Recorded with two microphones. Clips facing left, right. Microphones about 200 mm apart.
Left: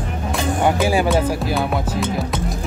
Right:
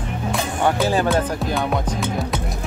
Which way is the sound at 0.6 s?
10° left (ahead or behind).